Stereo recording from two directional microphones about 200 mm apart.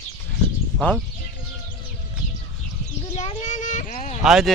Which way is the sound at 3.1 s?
35° left (ahead or behind).